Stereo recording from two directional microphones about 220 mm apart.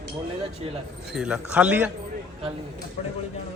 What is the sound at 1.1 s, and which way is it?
Speech, 5° right (ahead or behind).